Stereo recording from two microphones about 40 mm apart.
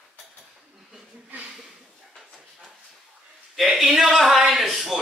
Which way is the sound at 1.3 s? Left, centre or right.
Right.